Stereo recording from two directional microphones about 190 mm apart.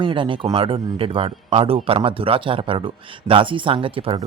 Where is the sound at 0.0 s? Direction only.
25° right (ahead or behind).